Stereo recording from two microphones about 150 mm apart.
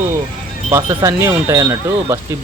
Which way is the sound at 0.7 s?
20° right (ahead or behind).